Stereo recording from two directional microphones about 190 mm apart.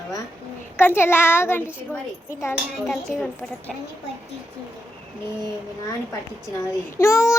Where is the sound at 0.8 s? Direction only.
10° left (ahead or behind).